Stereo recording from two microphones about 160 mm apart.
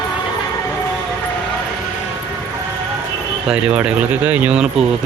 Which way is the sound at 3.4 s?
5° right (ahead or behind).